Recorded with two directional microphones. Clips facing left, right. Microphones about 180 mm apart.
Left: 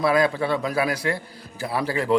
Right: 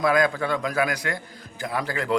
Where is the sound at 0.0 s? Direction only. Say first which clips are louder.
Left 1 dB; 30° left (ahead or behind).